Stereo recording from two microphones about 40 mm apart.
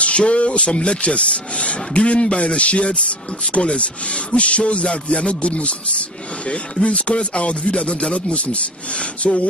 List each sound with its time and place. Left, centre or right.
0.0 s speech: left